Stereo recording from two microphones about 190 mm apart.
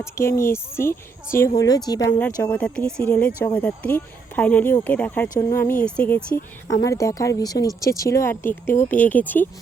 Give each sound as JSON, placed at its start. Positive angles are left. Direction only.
{"t": 0.0, "sound": "speech", "side_deg": 15}
{"t": 2.4, "sound": "speech", "side_deg": 5}
{"t": 6.8, "sound": "speech", "side_deg": 15}